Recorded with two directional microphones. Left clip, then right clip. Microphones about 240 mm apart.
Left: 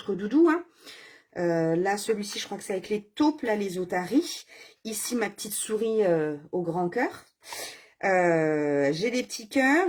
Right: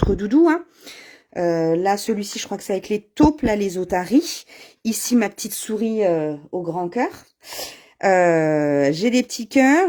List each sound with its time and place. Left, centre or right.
0.2 s speech: right
7.5 s speech: right